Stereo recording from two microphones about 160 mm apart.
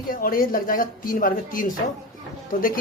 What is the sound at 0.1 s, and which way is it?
Speech, 65° left (ahead or behind).